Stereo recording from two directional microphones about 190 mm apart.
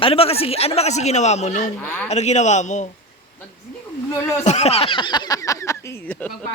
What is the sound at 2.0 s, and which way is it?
Speech, 35° left (ahead or behind).